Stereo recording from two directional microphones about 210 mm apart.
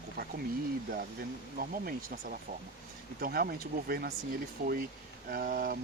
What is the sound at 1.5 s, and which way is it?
Speech, 45° right (ahead or behind).